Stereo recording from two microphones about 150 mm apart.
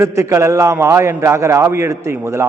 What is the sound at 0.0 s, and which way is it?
A man's voice, 20° right (ahead or behind).